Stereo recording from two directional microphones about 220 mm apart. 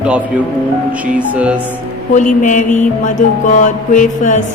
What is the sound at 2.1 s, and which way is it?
Music, 35° left (ahead or behind).